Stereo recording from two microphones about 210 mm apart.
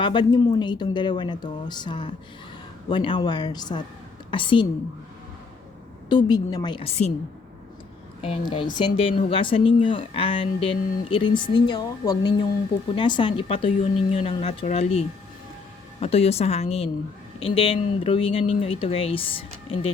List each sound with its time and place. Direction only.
0.0 s speech: 20° left (ahead or behind)
6.1 s speech: 20° left (ahead or behind)
8.2 s speech: 25° left (ahead or behind)